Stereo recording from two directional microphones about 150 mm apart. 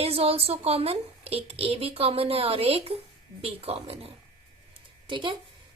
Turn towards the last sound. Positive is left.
turn(degrees=-30)  # may be behind; listen again after turning